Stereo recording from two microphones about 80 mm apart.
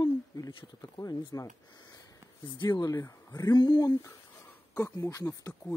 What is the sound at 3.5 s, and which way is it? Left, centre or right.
Speech, left.